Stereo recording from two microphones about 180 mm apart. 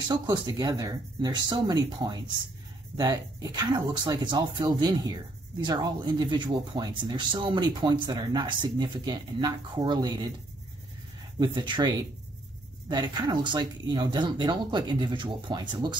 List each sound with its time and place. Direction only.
0.1 s speech: 25° right (ahead or behind)
11.3 s speech: 25° right (ahead or behind)